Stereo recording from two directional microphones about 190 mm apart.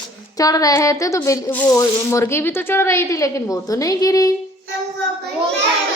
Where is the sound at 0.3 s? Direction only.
20° left (ahead or behind).